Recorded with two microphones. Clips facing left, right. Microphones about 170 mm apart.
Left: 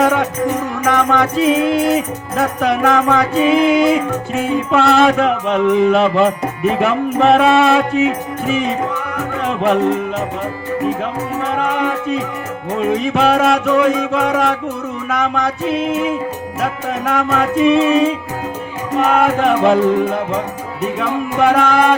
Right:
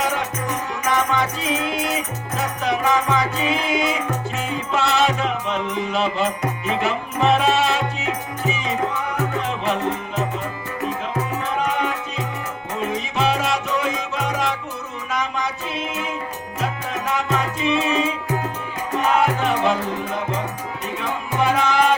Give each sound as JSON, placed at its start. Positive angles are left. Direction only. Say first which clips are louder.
{"t": 0.0, "sound": "music", "louder": "left 9 dB", "side_deg": 55}
{"t": 9.4, "sound": "music", "louder": "left 8 dB", "side_deg": 60}
{"t": 12.9, "sound": "music", "louder": "left 8 dB", "side_deg": 55}
{"t": 17.1, "sound": "music", "louder": "left 7 dB", "side_deg": 55}
{"t": 19.1, "sound": "music", "louder": "left 6 dB", "side_deg": 55}
{"t": 21.0, "sound": "music", "louder": "left 7 dB", "side_deg": 60}